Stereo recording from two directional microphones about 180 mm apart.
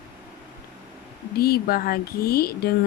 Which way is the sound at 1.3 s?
55° left (ahead or behind).